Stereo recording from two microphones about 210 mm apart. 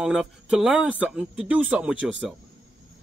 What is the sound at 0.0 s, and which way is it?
A man's voice, centre (ahead or behind).